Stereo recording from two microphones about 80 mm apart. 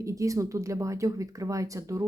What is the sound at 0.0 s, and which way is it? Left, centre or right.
Speech, right.